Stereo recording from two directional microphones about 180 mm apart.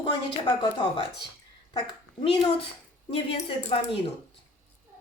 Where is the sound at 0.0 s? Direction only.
30° left (ahead or behind).